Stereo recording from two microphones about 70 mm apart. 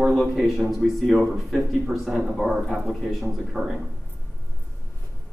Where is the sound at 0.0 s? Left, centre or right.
Centre.